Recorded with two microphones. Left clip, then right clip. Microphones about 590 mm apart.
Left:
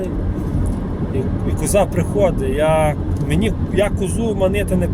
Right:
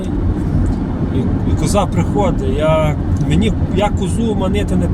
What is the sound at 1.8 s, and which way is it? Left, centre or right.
Speech, left.